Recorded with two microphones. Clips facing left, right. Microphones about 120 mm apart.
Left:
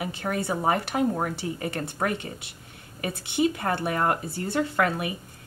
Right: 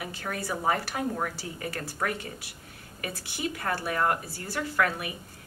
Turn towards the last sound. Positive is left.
turn(degrees=25)  # may be behind; listen again after turning